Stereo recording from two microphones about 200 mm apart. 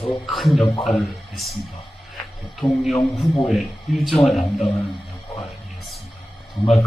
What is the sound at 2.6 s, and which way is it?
Speech, 20° left (ahead or behind).